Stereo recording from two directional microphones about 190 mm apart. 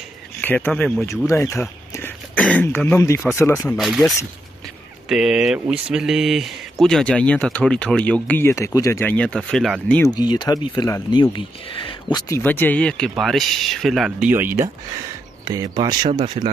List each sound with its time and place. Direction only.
0.4 s speech: 10° left (ahead or behind)
3.7 s speech: centre (ahead or behind)
10.1 s speech: 20° left (ahead or behind); by 16.4 s 25° right (ahead or behind)